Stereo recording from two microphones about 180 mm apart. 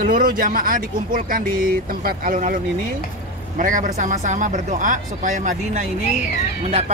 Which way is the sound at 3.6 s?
45° right (ahead or behind).